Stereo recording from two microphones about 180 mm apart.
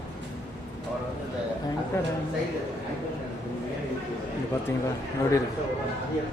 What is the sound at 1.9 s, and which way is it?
Speech, 15° left (ahead or behind).